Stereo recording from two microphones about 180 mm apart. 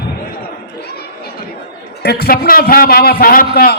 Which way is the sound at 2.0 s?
60° left (ahead or behind).